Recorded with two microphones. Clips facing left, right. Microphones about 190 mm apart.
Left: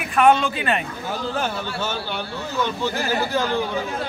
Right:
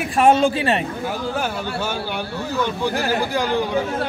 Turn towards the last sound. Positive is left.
turn(degrees=-15)  # may be behind; listen again after turning